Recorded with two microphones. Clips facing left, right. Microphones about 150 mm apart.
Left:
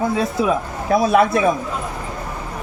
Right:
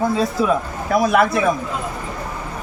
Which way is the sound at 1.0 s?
30° left (ahead or behind).